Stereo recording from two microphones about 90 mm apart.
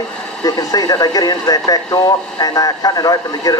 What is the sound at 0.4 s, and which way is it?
Speech, 45° left (ahead or behind).